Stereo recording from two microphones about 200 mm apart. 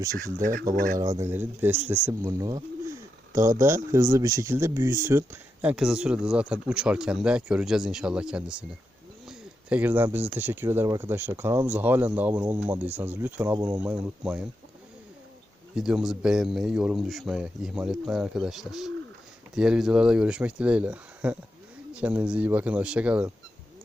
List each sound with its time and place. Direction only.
0.7 s speech: 45° right (ahead or behind)
0.9 s speech: 15° right (ahead or behind)
3.9 s speech: 15° right (ahead or behind)
15.7 s speech: 5° right (ahead or behind)